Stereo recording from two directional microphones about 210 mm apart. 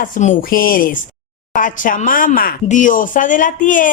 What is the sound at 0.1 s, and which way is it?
Speech, 35° left (ahead or behind).